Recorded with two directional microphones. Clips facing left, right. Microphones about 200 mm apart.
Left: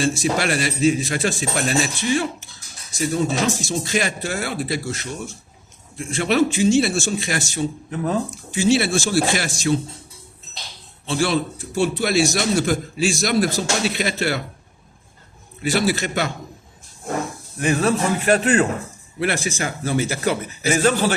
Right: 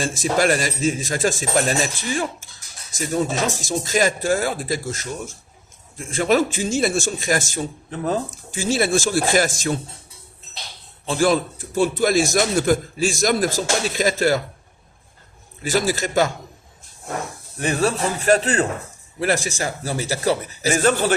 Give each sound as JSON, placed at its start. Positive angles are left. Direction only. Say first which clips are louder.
{"t": 0.0, "sound": "a man's voice", "louder": "right 1 dB", "side_deg": -45}
{"t": 6.0, "sound": "a man's voice", "louder": "even", "side_deg": -45}
{"t": 7.9, "sound": "speech", "louder": "right 2 dB", "side_deg": -35}
{"t": 8.4, "sound": "a man's voice", "louder": "left 3 dB", "side_deg": -50}
{"t": 11.0, "sound": "a man's voice", "louder": "right 2 dB", "side_deg": -45}
{"t": 15.7, "sound": "a man's voice", "louder": "right 1 dB", "side_deg": -45}
{"t": 17.6, "sound": "speech", "louder": "left 2 dB", "side_deg": -35}